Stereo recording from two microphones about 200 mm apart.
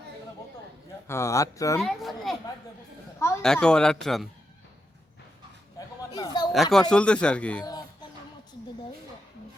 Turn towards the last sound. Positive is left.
turn(degrees=5)  # may be behind; listen again after turning